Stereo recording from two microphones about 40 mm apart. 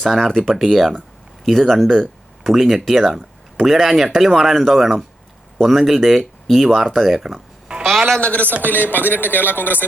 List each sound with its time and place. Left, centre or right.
0.0 s speech: centre
7.2 s speech: centre
7.9 s a sound: centre
8.2 s a man's voice: left
8.7 s a man's voice: left